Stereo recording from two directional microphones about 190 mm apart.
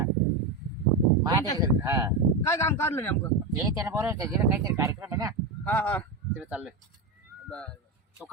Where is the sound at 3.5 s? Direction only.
15° right (ahead or behind).